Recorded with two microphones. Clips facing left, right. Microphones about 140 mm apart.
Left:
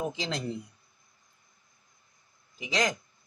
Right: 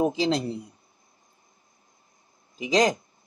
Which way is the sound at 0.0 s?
35° right (ahead or behind).